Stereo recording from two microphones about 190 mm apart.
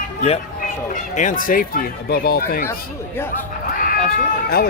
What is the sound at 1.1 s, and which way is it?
Speech, 40° left (ahead or behind).